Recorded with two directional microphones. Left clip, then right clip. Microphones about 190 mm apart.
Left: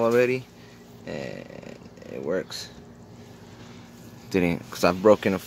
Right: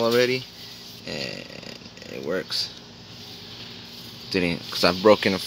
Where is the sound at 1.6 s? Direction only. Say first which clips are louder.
Right 3 dB; 5° right (ahead or behind).